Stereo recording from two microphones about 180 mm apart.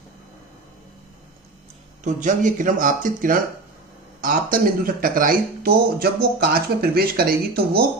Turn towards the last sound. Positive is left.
turn(degrees=-60)  # may be behind; listen again after turning